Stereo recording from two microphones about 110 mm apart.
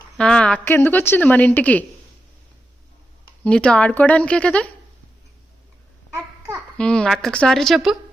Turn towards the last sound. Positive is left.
turn(degrees=0)  # may be behind; listen again after turning